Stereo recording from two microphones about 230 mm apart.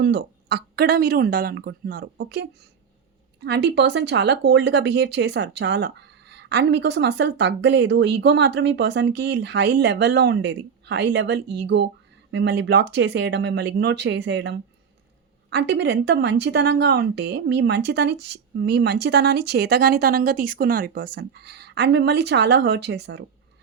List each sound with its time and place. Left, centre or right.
0.0 s speech: right